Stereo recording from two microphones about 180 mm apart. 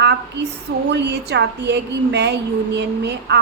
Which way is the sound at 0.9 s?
70° right (ahead or behind).